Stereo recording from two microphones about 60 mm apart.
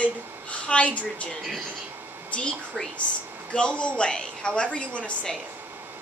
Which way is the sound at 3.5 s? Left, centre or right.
Centre.